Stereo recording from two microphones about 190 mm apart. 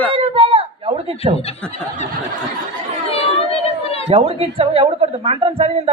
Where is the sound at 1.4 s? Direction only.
30° left (ahead or behind).